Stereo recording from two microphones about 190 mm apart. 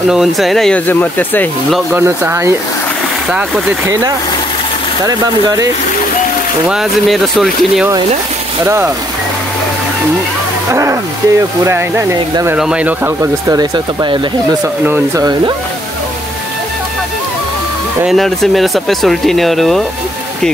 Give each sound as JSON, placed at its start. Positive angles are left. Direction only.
{"t": 0.1, "sound": "speech", "side_deg": 0}
{"t": 2.0, "sound": "speech", "side_deg": -10}
{"t": 5.0, "sound": "speech", "side_deg": -20}
{"t": 6.7, "sound": "speech", "side_deg": 0}
{"t": 8.6, "sound": "speech", "side_deg": -15}
{"t": 10.7, "sound": "speech", "side_deg": -15}
{"t": 14.9, "sound": "speech", "side_deg": -20}
{"t": 18.0, "sound": "speech", "side_deg": 0}